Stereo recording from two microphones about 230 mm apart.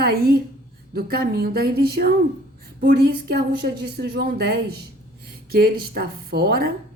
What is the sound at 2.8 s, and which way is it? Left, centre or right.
A woman's voice, right.